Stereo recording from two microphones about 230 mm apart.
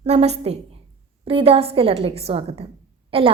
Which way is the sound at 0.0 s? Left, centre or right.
Right.